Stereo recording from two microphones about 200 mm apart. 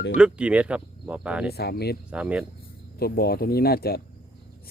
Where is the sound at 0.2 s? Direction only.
5° right (ahead or behind).